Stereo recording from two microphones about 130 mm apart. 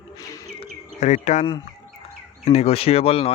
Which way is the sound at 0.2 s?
25° left (ahead or behind).